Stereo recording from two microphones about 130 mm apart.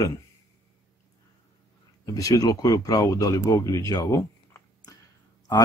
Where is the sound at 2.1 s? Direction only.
25° left (ahead or behind).